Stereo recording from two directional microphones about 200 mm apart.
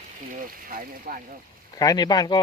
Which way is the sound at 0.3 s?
45° right (ahead or behind).